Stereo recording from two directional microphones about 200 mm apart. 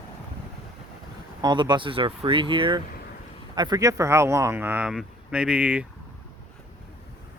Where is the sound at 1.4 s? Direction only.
20° right (ahead or behind).